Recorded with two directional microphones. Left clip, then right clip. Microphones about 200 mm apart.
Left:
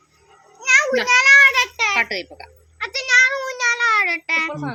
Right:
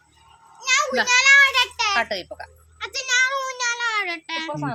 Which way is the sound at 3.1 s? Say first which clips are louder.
Left 5 dB; 15° left (ahead or behind).